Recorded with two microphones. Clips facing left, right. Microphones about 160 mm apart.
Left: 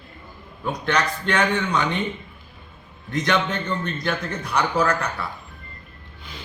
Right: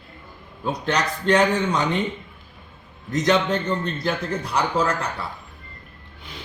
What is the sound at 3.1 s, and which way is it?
A man's voice, 35° right (ahead or behind).